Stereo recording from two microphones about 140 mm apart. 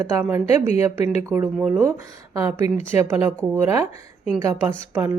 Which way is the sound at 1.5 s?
5° right (ahead or behind).